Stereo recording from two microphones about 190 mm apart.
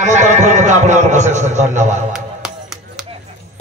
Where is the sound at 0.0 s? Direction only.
40° right (ahead or behind).